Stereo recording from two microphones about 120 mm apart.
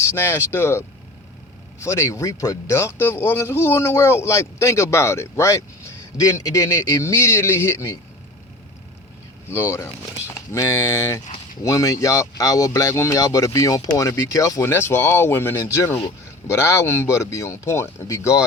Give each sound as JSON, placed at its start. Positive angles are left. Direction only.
{"t": 0.0, "sound": "speech", "side_deg": 25}
{"t": 9.5, "sound": "speech", "side_deg": 20}